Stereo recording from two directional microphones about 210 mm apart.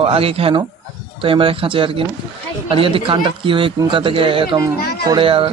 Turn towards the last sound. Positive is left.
turn(degrees=-25)  # may be behind; listen again after turning